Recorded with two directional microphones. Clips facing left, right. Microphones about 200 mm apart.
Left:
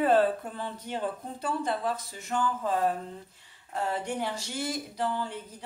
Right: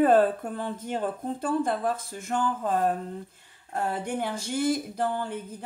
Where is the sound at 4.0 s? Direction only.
50° right (ahead or behind).